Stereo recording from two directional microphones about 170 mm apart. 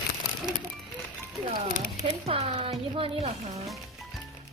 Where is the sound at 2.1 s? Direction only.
35° right (ahead or behind).